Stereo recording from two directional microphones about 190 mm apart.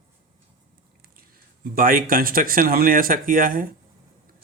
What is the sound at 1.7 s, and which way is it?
Speech, 50° right (ahead or behind).